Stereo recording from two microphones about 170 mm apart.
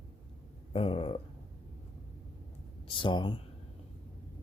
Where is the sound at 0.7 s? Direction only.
35° left (ahead or behind).